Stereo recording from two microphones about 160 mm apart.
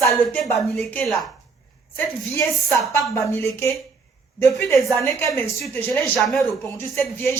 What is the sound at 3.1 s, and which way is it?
Speech, 15° left (ahead or behind).